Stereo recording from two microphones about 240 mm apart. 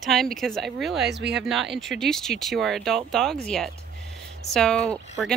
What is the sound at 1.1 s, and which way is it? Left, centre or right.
Speech, right.